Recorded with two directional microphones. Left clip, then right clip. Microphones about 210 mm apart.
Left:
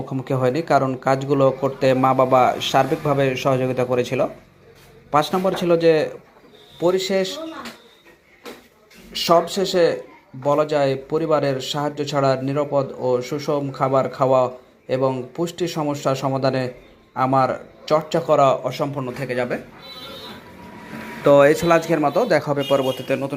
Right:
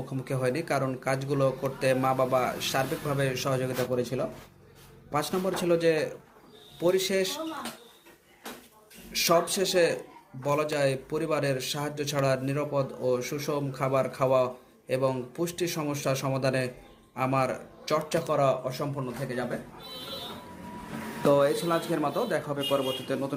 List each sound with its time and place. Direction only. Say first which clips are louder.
0.1 s speech: left 9 dB; 15° left (ahead or behind)
5.3 s speech: left 8 dB; 15° left (ahead or behind)
9.1 s speech: left 7 dB; 10° left (ahead or behind)
19.3 s a man's voice: left 11 dB; 25° left (ahead or behind)
21.2 s a man's voice: left 10 dB; 25° left (ahead or behind)